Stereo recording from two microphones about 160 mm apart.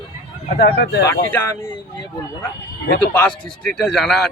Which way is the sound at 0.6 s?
90° left.